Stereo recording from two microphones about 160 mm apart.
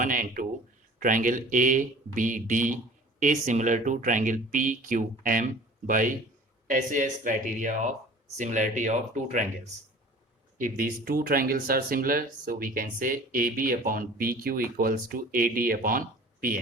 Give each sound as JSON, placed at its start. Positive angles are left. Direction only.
{"t": 0.0, "sound": "speech", "side_deg": -60}
{"t": 10.6, "sound": "speech", "side_deg": -65}